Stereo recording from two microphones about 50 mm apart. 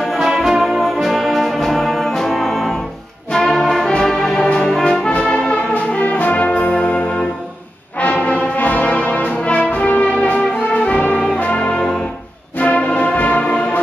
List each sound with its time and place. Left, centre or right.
0.0 s brass instrument: centre
2.1 s music: centre
3.3 s brass instrument: centre
3.9 s music: centre
4.6 s brass instrument: centre; by 6.7 s left
6.7 s music: left
8.0 s brass instrument: left
12.5 s music: left